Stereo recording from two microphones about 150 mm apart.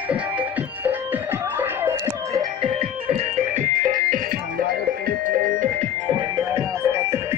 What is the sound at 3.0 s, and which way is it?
Music, 60° right (ahead or behind).